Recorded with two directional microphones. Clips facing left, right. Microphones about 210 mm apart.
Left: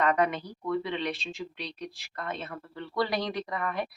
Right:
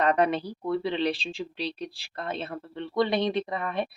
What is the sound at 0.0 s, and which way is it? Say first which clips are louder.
Speech: right 3 dB; 35° right (ahead or behind).